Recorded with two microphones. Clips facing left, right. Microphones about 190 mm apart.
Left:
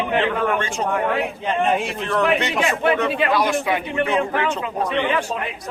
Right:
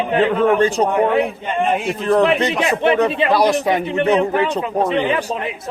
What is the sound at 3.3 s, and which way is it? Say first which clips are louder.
Speech: right 6 dB; 35° right (ahead or behind).